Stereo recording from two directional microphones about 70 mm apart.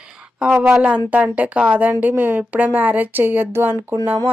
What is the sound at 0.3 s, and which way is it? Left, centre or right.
Speech, centre.